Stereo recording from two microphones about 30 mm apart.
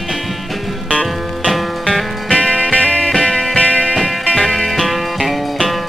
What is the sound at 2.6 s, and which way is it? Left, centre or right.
Music, left.